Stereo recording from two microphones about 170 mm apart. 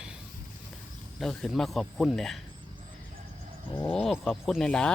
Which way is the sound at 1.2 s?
5° left (ahead or behind).